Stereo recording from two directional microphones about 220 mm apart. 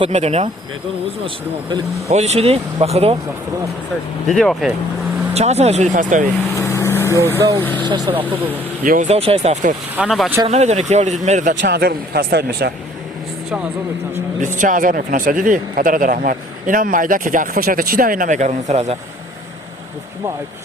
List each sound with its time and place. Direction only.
0.0 s speech: 30° right (ahead or behind)
1.7 s speech: 30° right (ahead or behind)
4.3 s speech: centre (ahead or behind)
5.3 s speech: 30° right (ahead or behind)
6.6 s vehicle: 10° left (ahead or behind)
7.3 s speech: 10° right (ahead or behind)
7.6 s speech: 10° left (ahead or behind)
7.9 s speech: 15° right (ahead or behind)
8.8 s speech: 35° right (ahead or behind)
9.9 s speech: 5° right (ahead or behind)
10.4 s speech: 30° right (ahead or behind)
11.6 s speech: 45° right (ahead or behind)
14.4 s speech: 35° right (ahead or behind)